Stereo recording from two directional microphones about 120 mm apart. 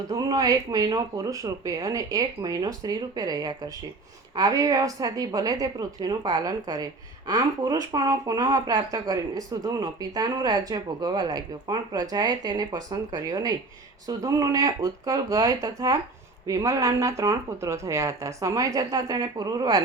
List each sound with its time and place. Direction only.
0.1 s speech: 30° right (ahead or behind)